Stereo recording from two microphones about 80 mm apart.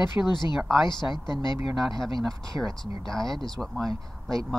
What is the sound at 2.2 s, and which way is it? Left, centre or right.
Speech, centre.